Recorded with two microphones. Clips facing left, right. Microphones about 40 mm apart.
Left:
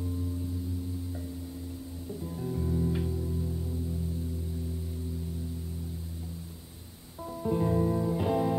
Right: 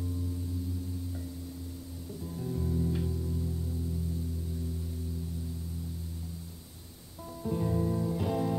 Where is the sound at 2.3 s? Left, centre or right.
Centre.